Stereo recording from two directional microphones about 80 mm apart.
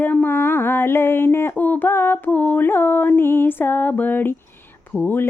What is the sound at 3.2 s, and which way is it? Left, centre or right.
Music, left.